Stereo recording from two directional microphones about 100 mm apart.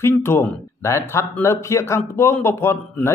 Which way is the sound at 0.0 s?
25° left (ahead or behind).